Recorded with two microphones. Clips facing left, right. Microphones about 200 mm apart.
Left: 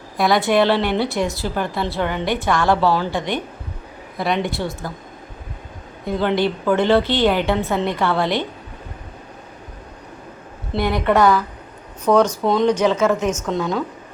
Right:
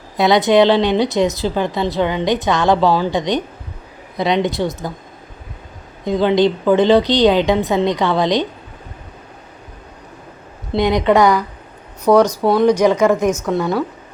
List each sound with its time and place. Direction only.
0.2 s a woman's voice: 20° right (ahead or behind)
6.1 s a woman's voice: 15° right (ahead or behind)
10.8 s a woman's voice: 15° right (ahead or behind)